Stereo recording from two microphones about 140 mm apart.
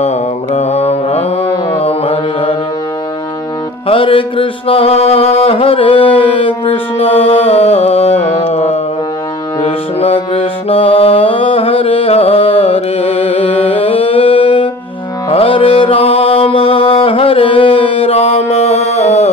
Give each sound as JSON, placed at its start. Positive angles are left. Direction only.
{"t": 0.0, "sound": "mantra", "side_deg": 50}
{"t": 1.7, "sound": "music", "side_deg": 45}
{"t": 3.8, "sound": "music", "side_deg": 40}